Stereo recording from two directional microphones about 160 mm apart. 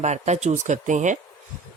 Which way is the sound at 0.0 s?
45° right (ahead or behind).